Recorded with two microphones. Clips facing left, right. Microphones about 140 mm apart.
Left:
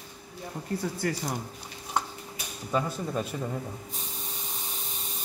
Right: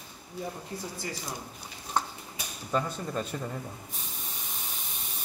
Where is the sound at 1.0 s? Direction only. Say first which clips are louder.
Left 10 dB; 60° left (ahead or behind).